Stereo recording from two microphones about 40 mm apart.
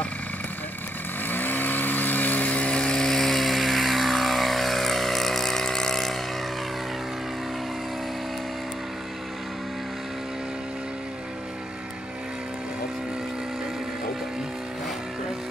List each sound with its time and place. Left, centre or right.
1.2 s vehicle: left
3.1 s vehicle: centre